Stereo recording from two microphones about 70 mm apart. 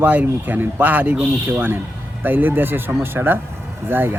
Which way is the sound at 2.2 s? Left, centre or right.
Right.